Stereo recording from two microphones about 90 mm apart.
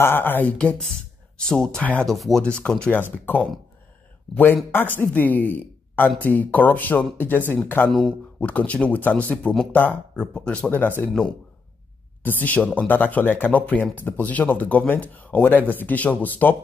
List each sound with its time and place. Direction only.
0.0 s speech: 25° left (ahead or behind)
2.0 s speech: centre (ahead or behind)
2.9 s speech: 20° left (ahead or behind)
4.7 s speech: 20° left (ahead or behind)
7.9 s speech: 10° left (ahead or behind)
12.2 s speech: 20° left (ahead or behind)